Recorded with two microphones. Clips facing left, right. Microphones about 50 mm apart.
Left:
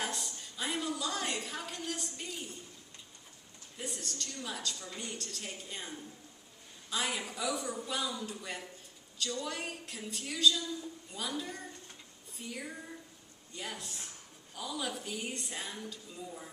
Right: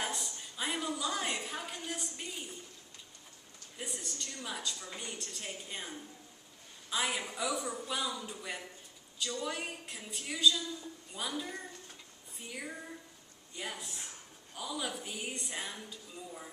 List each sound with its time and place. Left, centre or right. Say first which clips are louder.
0.0 s a woman's voice: even; centre
3.7 s a woman's voice: left 1 dB; centre